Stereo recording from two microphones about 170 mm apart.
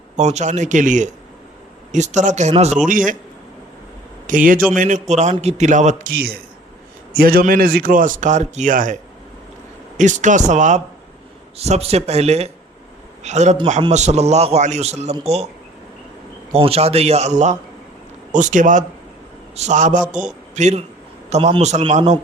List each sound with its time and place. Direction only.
0.2 s speech: 45° right (ahead or behind)
4.3 s speech: 55° right (ahead or behind)
10.0 s a man's voice: 45° right (ahead or behind)
16.5 s a man's voice: 35° right (ahead or behind)